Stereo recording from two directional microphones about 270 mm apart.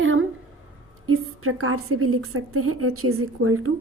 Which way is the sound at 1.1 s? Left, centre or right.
Right.